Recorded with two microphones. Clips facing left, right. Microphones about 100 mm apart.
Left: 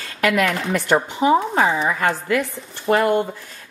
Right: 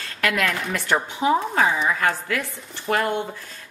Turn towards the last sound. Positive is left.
turn(degrees=20)  # may be behind; listen again after turning